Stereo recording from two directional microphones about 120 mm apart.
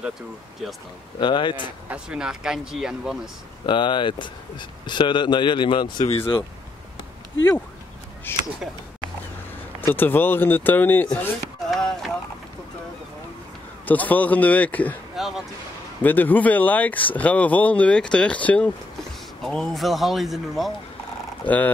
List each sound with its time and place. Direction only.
1.2 s speech: 40° left (ahead or behind)
1.9 s speech: 5° right (ahead or behind)
3.6 s speech: 40° left (ahead or behind)
8.3 s speech: 20° left (ahead or behind)
9.9 s speech: 15° left (ahead or behind)
11.7 s a sound: centre (ahead or behind)
13.8 s speech: 15° left (ahead or behind)
15.1 s basketball bounce: centre (ahead or behind)
16.0 s speech: 15° left (ahead or behind); by 20.7 s centre (ahead or behind)